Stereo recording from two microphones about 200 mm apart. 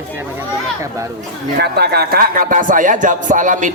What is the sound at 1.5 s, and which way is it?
Music, 55° right (ahead or behind).